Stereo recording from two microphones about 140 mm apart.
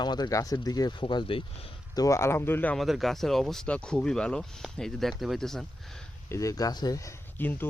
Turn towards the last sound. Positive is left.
turn(degrees=15)  # may be behind; listen again after turning